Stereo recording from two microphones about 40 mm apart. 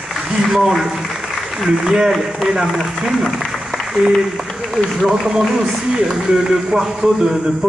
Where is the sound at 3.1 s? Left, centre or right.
Centre.